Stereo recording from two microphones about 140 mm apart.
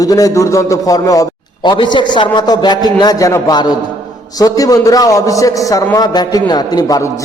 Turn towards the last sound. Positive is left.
turn(degrees=25)  # may be behind; listen again after turning